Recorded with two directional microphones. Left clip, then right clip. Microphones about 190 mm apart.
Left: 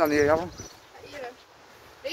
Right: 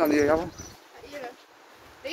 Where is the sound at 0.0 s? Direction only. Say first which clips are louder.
Even; 10° left (ahead or behind).